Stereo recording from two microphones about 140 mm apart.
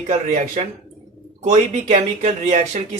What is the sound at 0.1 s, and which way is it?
Speech, 55° right (ahead or behind).